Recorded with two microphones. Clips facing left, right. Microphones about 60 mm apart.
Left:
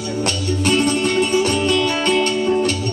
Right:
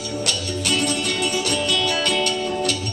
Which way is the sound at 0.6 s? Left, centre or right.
Left.